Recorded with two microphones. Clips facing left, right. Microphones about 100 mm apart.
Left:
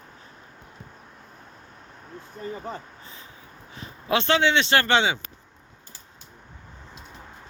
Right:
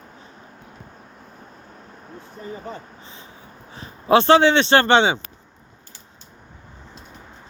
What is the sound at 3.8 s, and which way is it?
Speech, 30° right (ahead or behind).